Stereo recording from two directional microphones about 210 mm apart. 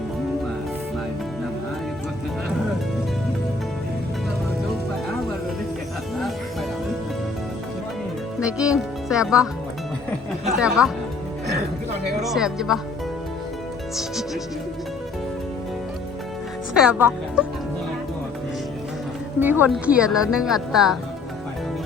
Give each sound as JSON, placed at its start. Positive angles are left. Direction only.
{"t": 8.4, "sound": "speech", "side_deg": -5}
{"t": 10.6, "sound": "speech", "side_deg": 0}
{"t": 12.2, "sound": "speech", "side_deg": 0}
{"t": 16.7, "sound": "speech", "side_deg": -5}
{"t": 19.4, "sound": "speech", "side_deg": -10}